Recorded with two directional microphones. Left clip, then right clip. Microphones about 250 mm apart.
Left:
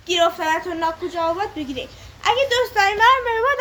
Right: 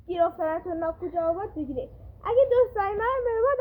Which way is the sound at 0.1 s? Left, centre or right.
Left.